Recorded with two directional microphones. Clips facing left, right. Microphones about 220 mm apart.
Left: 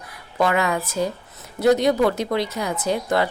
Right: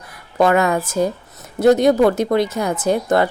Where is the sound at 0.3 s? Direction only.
45° right (ahead or behind).